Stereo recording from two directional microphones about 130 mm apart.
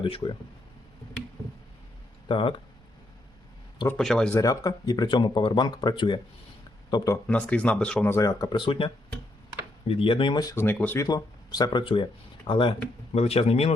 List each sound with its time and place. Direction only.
0.0 s speech: 40° left (ahead or behind)
2.2 s speech: 40° left (ahead or behind)
3.9 s speech: 5° left (ahead or behind)
4.4 s speech: 30° left (ahead or behind)
7.3 s speech: 10° left (ahead or behind)
8.1 s speech: 25° left (ahead or behind)
10.5 s speech: 15° left (ahead or behind)
11.0 s speech: 30° left (ahead or behind)
13.1 s speech: 50° left (ahead or behind)